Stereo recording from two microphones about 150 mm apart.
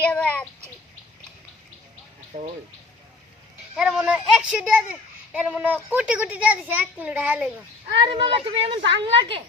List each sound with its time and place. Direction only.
0.0 s a sound: 10° left (ahead or behind)
2.3 s speech: 50° right (ahead or behind)
3.8 s a child's voice: 5° right (ahead or behind)
8.0 s a woman's voice: 35° right (ahead or behind)